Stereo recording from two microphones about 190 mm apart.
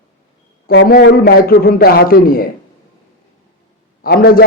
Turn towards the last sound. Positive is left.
turn(degrees=50)  # may be behind; listen again after turning